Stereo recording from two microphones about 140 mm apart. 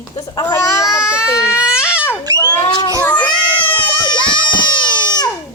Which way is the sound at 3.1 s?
35° left (ahead or behind).